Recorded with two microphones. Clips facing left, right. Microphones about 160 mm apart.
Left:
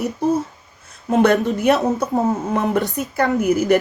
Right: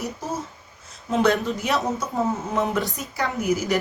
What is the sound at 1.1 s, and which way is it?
Speech, 50° left (ahead or behind).